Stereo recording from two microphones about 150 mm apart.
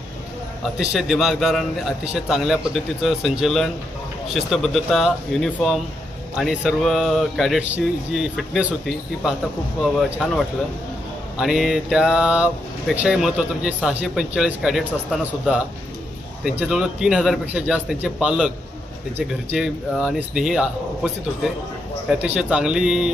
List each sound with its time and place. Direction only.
0.7 s speech: 5° right (ahead or behind)
11.3 s speech: centre (ahead or behind)
22.2 s speech: 5° right (ahead or behind)